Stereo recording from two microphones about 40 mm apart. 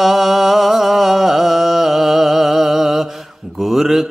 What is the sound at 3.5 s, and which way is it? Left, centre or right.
Mantra, centre.